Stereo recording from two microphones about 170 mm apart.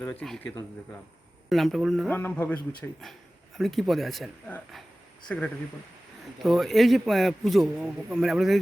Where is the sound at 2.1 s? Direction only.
10° left (ahead or behind).